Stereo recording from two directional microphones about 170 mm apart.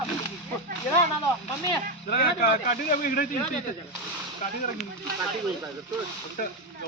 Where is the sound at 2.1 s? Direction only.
60° left (ahead or behind).